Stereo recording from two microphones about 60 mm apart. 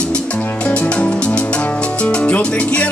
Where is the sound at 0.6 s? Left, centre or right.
Centre.